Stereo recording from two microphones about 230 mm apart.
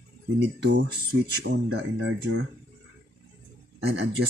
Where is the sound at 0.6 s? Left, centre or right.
Right.